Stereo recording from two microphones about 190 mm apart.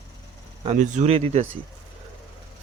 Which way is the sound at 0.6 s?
35° right (ahead or behind).